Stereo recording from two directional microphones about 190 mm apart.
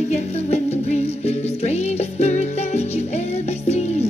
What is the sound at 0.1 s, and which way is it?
Music, 35° left (ahead or behind).